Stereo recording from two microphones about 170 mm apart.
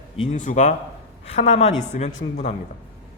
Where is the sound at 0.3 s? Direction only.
45° left (ahead or behind).